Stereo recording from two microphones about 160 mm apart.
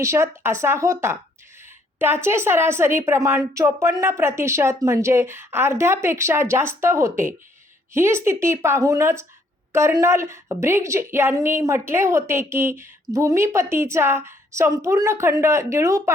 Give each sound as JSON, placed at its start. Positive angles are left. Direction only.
{"t": 0.0, "sound": "a woman's voice", "side_deg": -15}